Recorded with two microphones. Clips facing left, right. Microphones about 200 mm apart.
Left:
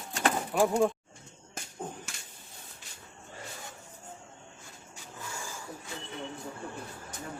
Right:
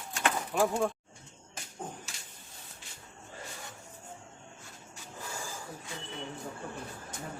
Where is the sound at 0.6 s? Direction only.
20° left (ahead or behind).